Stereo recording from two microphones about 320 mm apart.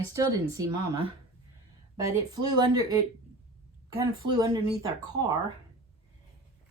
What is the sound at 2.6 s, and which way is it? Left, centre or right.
Speech, centre.